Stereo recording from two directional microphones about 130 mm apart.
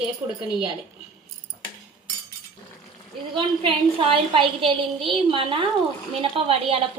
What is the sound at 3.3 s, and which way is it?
A woman's voice, 45° right (ahead or behind).